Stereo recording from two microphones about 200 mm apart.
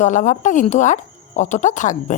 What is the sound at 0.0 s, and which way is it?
Speech, 35° left (ahead or behind).